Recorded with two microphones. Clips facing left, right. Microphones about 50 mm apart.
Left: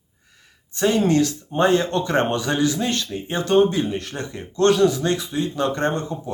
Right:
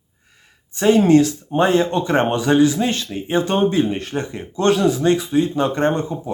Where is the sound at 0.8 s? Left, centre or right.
Right.